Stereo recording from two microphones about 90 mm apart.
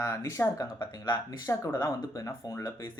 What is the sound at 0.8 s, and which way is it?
Speech, 55° left (ahead or behind).